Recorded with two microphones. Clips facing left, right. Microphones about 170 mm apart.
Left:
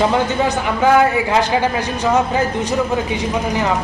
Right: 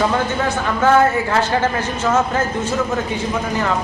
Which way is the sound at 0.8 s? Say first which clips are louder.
Left 1 dB; 15° left (ahead or behind).